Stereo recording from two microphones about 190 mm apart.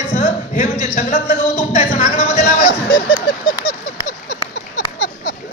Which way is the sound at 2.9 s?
25° left (ahead or behind).